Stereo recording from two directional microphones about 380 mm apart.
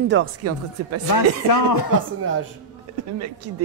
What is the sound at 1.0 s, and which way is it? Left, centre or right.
Speech, left.